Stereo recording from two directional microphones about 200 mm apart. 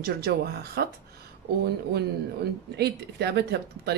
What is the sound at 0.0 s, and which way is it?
Speech, 50° right (ahead or behind).